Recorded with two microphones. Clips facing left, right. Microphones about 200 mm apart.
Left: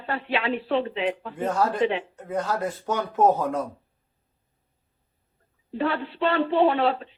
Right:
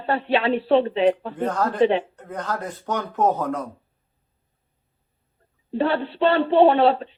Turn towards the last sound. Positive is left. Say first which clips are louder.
# right 5 dB
turn(degrees=-30)  # may be behind; listen again after turning